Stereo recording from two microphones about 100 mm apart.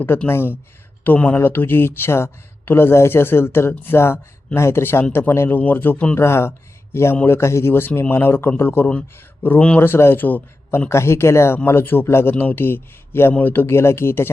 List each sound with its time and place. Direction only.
0.3 s a man's voice: 20° left (ahead or behind)
6.1 s a man's voice: 25° left (ahead or behind)